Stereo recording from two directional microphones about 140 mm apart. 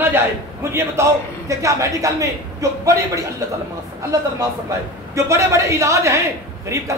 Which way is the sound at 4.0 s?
25° right (ahead or behind).